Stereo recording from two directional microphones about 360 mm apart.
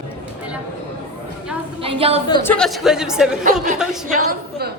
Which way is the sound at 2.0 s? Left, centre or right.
Centre.